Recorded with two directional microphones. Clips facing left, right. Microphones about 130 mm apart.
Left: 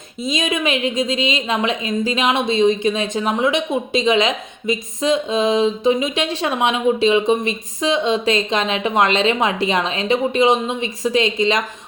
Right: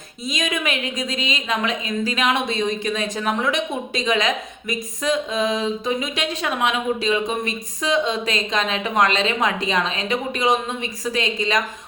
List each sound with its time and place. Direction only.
0.3 s a woman's voice: 25° left (ahead or behind)